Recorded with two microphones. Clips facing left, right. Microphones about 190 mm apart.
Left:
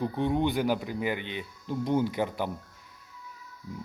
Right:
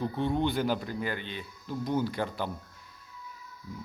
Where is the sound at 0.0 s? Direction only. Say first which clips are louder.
Left 2 dB; 15° left (ahead or behind).